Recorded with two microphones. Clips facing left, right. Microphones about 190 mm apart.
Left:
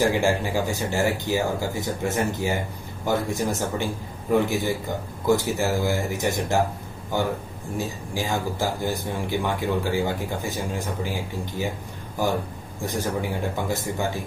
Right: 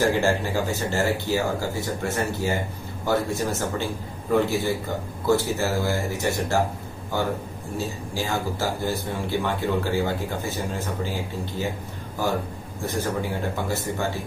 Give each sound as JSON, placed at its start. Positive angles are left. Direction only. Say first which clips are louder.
{"t": 0.1, "sound": "a man's voice", "louder": "even", "side_deg": 15}